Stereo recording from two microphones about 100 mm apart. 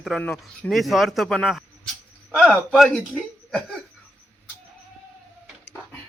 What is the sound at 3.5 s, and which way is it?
Cough, centre (ahead or behind).